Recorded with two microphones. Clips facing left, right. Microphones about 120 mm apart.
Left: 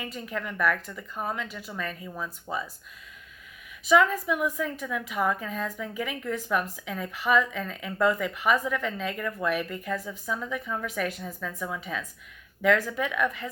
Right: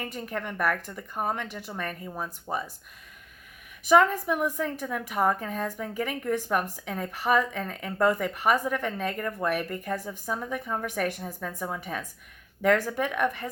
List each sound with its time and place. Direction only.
0.0 s a woman's voice: 50° right (ahead or behind)
2.0 s speech: 40° right (ahead or behind)
3.8 s a woman's voice: 45° right (ahead or behind)